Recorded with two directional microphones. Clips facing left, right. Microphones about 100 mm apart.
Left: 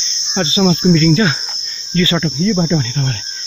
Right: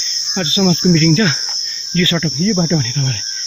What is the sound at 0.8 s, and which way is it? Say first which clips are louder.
Cricket: even; 15° left (ahead or behind).